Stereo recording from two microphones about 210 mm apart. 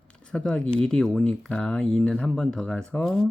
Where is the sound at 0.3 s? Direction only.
5° left (ahead or behind).